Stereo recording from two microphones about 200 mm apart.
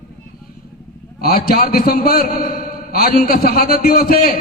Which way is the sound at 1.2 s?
50° left (ahead or behind).